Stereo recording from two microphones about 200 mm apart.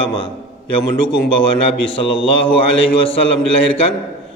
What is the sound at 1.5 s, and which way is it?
A man's voice, 25° left (ahead or behind).